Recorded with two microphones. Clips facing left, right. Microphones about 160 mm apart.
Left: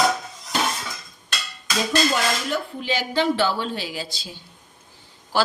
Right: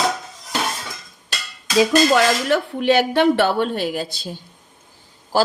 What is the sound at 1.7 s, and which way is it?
Speech, 90° right.